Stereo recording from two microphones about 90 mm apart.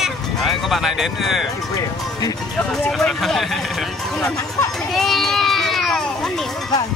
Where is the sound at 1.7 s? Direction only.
45° left (ahead or behind).